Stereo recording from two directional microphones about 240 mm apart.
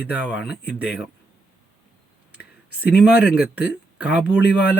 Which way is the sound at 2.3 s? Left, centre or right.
Centre.